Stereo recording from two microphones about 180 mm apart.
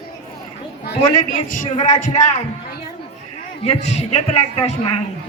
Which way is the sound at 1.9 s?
45° left (ahead or behind).